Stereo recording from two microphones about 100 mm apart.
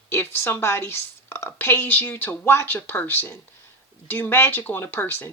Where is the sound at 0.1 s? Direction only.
25° left (ahead or behind).